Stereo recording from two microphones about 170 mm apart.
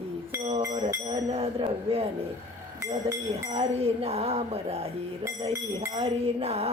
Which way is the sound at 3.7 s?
35° right (ahead or behind).